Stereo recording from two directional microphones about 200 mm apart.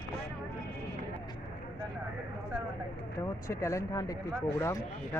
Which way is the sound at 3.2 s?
15° left (ahead or behind).